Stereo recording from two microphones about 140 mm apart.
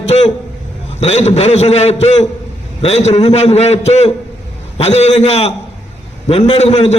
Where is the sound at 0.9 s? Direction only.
50° left (ahead or behind).